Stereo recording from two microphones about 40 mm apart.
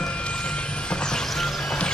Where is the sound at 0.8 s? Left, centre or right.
Centre.